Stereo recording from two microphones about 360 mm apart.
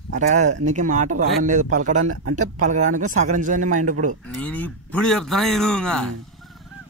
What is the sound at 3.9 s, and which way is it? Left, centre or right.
Speech, right.